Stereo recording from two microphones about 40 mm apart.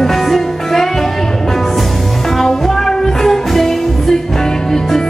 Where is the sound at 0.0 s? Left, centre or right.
Centre.